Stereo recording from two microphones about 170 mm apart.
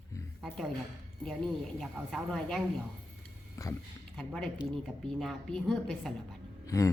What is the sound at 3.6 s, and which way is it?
Speech, 20° left (ahead or behind).